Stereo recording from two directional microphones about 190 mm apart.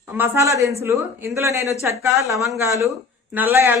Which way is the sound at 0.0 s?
10° right (ahead or behind).